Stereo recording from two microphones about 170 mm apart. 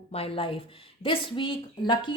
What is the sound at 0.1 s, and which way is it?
Speech, 35° left (ahead or behind).